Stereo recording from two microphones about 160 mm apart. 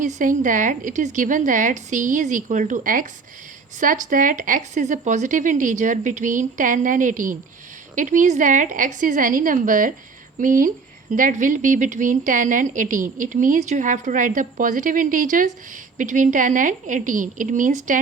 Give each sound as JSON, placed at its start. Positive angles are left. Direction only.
{"t": 0.0, "sound": "a woman's voice", "side_deg": -50}